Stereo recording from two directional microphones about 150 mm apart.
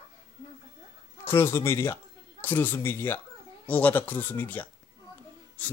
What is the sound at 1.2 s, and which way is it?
Speech, 15° left (ahead or behind).